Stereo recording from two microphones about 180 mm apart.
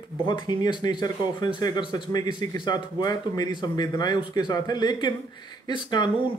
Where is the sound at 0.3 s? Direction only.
25° left (ahead or behind).